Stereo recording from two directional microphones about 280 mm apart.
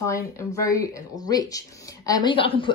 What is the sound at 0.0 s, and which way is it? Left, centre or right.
Speech, centre.